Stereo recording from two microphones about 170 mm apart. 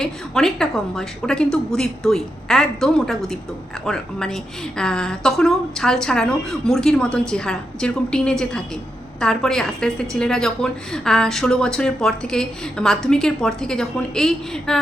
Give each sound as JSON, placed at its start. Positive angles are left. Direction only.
{"t": 0.0, "sound": "a woman's voice", "side_deg": 5}